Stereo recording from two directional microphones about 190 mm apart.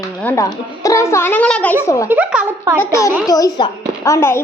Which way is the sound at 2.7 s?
15° left (ahead or behind).